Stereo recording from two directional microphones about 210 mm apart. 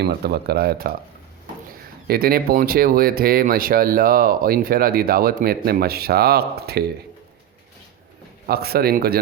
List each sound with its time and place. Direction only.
0.0 s speech: 50° right (ahead or behind)
2.0 s speech: 45° right (ahead or behind)
8.4 s speech: 45° right (ahead or behind)